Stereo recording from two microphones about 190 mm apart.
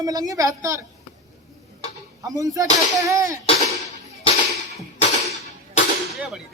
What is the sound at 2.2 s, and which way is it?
Speech, 20° right (ahead or behind).